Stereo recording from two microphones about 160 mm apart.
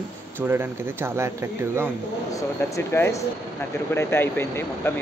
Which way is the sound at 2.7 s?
15° left (ahead or behind).